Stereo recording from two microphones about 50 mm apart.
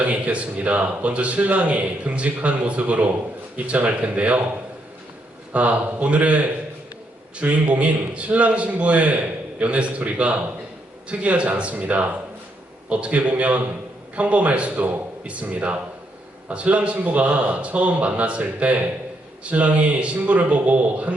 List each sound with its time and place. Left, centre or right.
0.0 s speech: right
5.5 s speech: right